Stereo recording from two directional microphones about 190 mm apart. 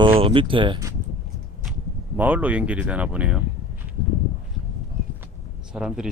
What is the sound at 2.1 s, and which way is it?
Speech, 10° right (ahead or behind).